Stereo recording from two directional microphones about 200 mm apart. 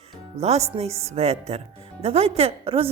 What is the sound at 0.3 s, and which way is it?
Speech, 30° right (ahead or behind).